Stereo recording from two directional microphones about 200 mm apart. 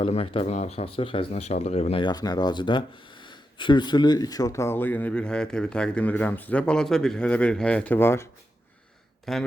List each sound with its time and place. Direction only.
0.0 s speech: 30° left (ahead or behind); by 8.3 s 10° left (ahead or behind)
9.2 s speech: centre (ahead or behind)